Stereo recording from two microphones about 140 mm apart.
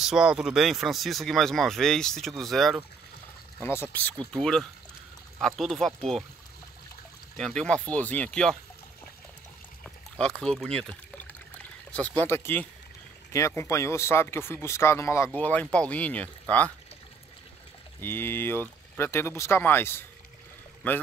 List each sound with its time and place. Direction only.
0.0 s speech: 5° right (ahead or behind)
3.6 s speech: 15° left (ahead or behind)
7.3 s speech: 5° left (ahead or behind)
9.8 s speech: 5° left (ahead or behind)
18.0 s speech: 15° left (ahead or behind)